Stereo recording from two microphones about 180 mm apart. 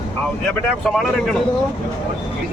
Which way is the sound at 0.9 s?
Centre (ahead or behind).